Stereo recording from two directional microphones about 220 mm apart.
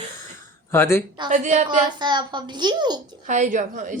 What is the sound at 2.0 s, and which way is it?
A woman's voice, 20° right (ahead or behind).